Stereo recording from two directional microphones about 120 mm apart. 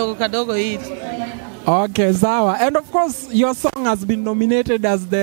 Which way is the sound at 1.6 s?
20° right (ahead or behind).